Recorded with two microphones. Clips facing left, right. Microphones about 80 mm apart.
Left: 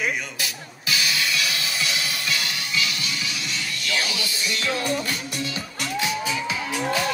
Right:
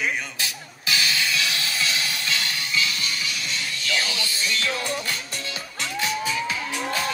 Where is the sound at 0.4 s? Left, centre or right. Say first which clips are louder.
Even; right.